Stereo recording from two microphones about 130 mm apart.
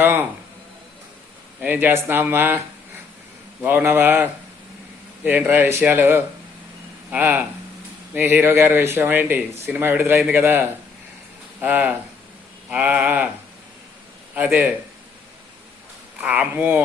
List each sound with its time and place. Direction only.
0.0 s a sound: 15° right (ahead or behind)
1.6 s speech: 15° right (ahead or behind)
3.6 s speech: 15° right (ahead or behind)
14.3 s speech: 15° right (ahead or behind)
16.2 s speech: 10° right (ahead or behind)